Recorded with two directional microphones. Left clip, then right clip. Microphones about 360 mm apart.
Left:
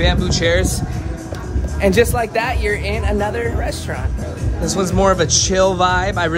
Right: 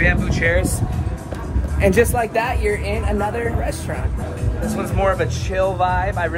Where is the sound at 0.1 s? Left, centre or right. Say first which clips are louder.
Left 2 dB; centre.